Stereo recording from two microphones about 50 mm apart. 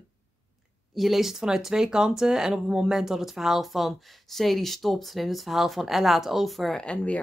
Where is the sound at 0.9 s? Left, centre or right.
Centre.